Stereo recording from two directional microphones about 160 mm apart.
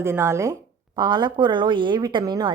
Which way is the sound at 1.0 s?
25° right (ahead or behind).